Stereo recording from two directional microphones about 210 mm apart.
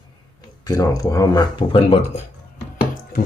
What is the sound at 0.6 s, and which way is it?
Speech, 15° left (ahead or behind).